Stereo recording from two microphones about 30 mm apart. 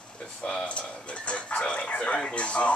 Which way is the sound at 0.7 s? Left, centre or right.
Left.